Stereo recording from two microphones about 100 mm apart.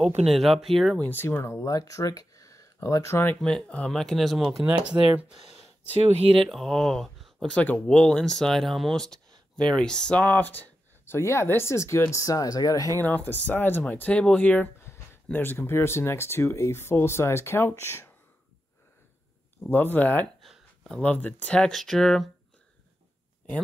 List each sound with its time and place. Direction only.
0.3 s speech: centre (ahead or behind)
1.0 s speech: 20° left (ahead or behind)
3.3 s speech: 5° left (ahead or behind)
4.9 s speech: 30° right (ahead or behind)
5.3 s a sound: 5° right (ahead or behind)
5.9 s speech: 80° right
6.3 s speech: centre (ahead or behind)
10.3 s speech: 20° left (ahead or behind); by 12.9 s 35° left (ahead or behind)
13.0 s speech: 20° left (ahead or behind)
19.6 s speech: 20° left (ahead or behind)
20.3 s a sound: centre (ahead or behind)
21.0 s speech: 15° left (ahead or behind)